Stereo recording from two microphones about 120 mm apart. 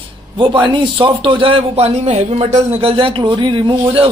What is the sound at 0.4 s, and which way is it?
A man's voice, 40° right (ahead or behind).